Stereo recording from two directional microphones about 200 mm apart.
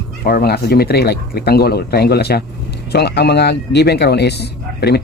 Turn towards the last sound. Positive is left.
turn(degrees=55)  # may be behind; listen again after turning